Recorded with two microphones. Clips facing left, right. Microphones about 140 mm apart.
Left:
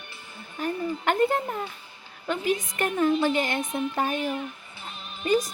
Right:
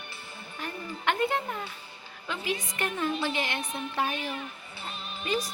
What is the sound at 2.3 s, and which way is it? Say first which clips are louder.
A woman's voice: left 7 dB; 55° left (ahead or behind).